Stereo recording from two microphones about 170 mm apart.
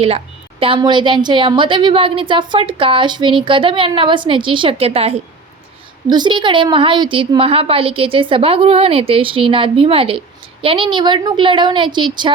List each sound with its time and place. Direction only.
0.6 s a woman's voice: 30° right (ahead or behind)